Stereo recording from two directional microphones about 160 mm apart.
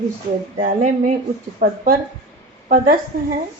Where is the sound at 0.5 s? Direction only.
45° right (ahead or behind).